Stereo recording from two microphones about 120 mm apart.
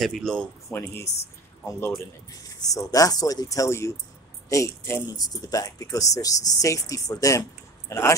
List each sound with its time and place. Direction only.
0.0 s speech: 5° left (ahead or behind)
0.7 s speech: 20° left (ahead or behind)
2.4 s speech: 30° left (ahead or behind)